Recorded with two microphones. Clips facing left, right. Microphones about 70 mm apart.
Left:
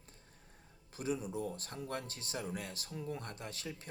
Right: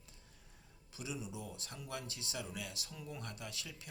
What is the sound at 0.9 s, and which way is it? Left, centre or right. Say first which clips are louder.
Speech: left 7 dB; left.